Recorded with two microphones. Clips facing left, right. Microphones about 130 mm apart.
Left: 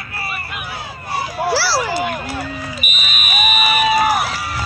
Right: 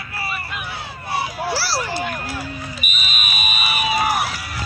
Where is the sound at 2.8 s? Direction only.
55° left (ahead or behind); by 4.6 s 75° left (ahead or behind).